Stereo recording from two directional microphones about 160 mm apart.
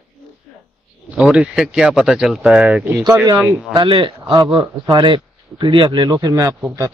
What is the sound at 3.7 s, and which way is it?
Speech, 30° right (ahead or behind).